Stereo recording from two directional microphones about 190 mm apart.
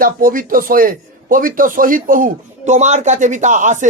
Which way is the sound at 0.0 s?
50° right (ahead or behind).